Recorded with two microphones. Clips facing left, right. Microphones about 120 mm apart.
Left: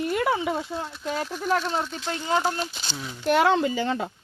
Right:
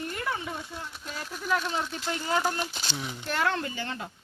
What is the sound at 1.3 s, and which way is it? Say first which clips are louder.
Speech: left 2 dB; 40° left (ahead or behind).